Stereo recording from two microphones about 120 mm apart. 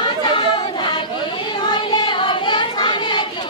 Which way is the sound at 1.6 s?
40° left (ahead or behind).